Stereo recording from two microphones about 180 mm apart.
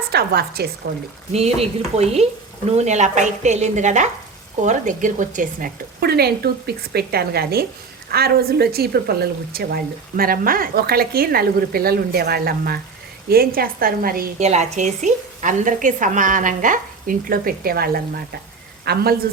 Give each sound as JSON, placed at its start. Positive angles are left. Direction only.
{"t": 0.1, "sound": "a woman's voice", "side_deg": -60}
{"t": 1.3, "sound": "a woman's voice", "side_deg": -35}
{"t": 14.3, "sound": "a woman's voice", "side_deg": -40}